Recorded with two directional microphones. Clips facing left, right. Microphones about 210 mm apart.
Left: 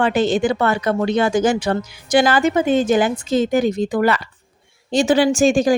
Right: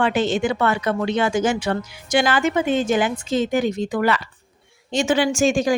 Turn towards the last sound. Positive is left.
turn(degrees=35)  # may be behind; listen again after turning